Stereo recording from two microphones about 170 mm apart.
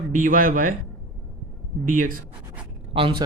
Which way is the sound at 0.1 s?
50° right (ahead or behind).